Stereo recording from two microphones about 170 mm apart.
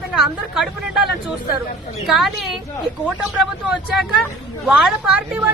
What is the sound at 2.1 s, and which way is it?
A woman's voice, centre (ahead or behind).